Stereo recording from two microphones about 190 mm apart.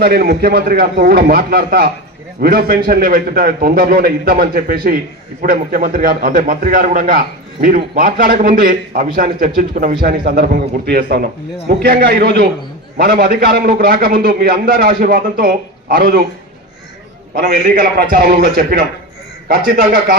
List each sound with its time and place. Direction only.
0.0 s a man's voice: 55° right (ahead or behind)
17.3 s a man's voice: 55° right (ahead or behind)